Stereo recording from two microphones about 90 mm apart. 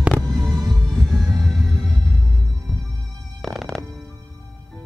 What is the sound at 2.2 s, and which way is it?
Music, 35° right (ahead or behind).